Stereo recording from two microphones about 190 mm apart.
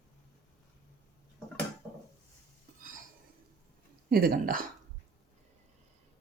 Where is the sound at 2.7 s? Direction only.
45° right (ahead or behind).